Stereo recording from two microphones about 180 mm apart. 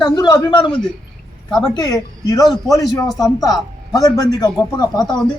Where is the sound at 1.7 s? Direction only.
20° left (ahead or behind).